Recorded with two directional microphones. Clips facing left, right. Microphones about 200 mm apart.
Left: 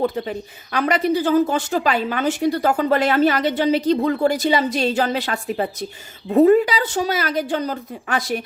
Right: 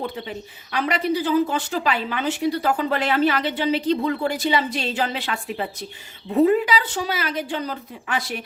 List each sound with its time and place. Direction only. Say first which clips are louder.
0.0 s speech: left 7 dB; 45° left (ahead or behind)